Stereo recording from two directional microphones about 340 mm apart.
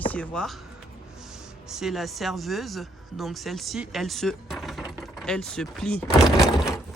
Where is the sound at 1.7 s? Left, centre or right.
Centre.